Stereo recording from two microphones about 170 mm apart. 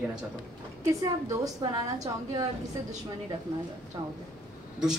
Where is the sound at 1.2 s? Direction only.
20° right (ahead or behind).